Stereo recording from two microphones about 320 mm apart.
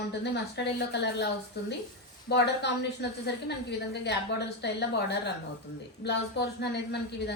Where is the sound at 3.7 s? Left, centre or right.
Left.